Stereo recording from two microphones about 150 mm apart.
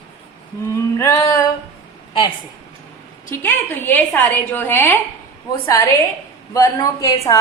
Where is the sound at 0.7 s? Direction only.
20° left (ahead or behind).